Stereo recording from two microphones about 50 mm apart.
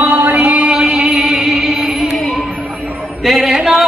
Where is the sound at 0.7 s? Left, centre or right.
Centre.